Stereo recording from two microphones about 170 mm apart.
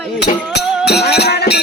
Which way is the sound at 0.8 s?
75° left (ahead or behind).